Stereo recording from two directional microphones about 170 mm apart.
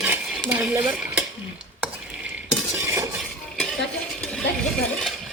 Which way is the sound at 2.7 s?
15° right (ahead or behind).